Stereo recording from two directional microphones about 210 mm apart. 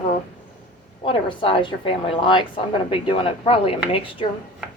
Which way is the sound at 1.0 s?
25° left (ahead or behind).